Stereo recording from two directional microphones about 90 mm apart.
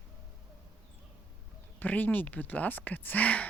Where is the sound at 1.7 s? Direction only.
20° left (ahead or behind).